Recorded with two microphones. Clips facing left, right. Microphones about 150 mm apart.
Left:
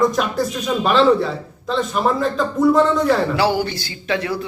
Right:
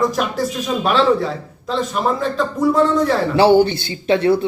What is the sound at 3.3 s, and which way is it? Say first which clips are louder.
A man's voice: right 7 dB; 25° right (ahead or behind).